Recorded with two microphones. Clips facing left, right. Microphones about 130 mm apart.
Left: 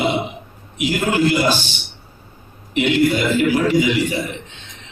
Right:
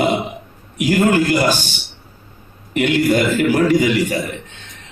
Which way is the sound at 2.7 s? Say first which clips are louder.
Right 1 dB; 45° right (ahead or behind).